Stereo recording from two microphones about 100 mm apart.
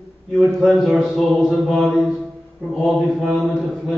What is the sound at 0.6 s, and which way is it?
A man's voice, 5° right (ahead or behind).